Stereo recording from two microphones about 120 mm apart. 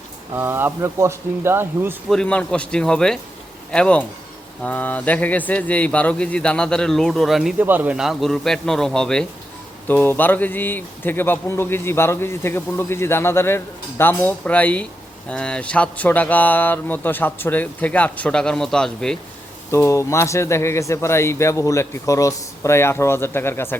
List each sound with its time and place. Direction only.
0.3 s speech: 20° right (ahead or behind)
2.0 s speech: 10° left (ahead or behind)
7.6 s speech: 15° right (ahead or behind)
7.9 s a man's voice: centre (ahead or behind)
19.7 s speech: 25° left (ahead or behind)